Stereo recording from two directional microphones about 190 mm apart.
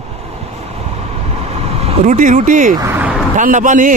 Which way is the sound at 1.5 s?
30° right (ahead or behind).